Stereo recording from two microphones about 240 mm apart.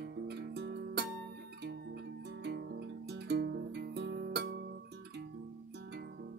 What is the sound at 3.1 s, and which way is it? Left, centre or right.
Guitar, right.